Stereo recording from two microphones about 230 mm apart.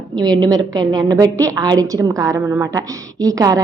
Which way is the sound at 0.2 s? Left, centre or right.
Centre.